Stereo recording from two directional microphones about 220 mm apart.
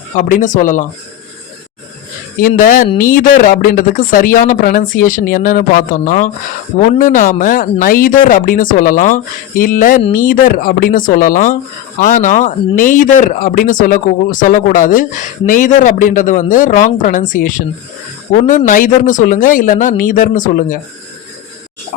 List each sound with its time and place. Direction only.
0.2 s speech: 35° left (ahead or behind)
2.4 s speech: 40° left (ahead or behind)